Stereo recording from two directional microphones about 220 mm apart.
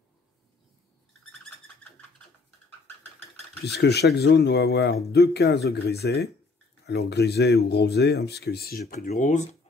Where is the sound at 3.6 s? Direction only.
50° left (ahead or behind).